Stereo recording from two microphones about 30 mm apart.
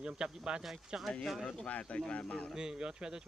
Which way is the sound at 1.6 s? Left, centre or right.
Left.